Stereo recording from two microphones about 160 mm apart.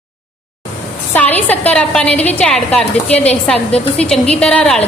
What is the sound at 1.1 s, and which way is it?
A woman's voice, 10° left (ahead or behind).